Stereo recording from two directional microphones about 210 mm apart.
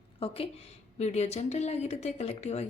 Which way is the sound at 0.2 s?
25° left (ahead or behind).